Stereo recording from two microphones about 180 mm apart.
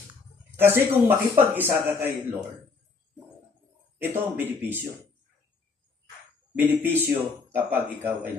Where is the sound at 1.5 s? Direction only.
10° right (ahead or behind).